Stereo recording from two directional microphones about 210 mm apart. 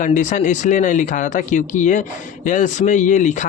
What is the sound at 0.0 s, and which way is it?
Speech, 35° left (ahead or behind).